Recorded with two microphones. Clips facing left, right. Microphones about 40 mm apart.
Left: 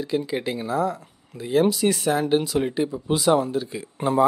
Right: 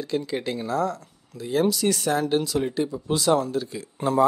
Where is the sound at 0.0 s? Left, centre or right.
Centre.